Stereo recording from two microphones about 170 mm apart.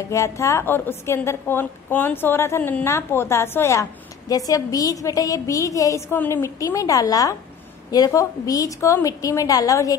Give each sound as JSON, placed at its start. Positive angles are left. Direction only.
{"t": 0.0, "sound": "a woman's voice", "side_deg": 15}